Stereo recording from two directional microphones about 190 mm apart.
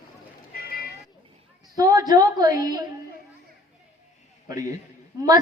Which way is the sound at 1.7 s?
20° right (ahead or behind).